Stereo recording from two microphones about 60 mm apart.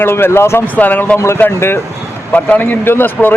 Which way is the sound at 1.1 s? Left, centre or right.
Left.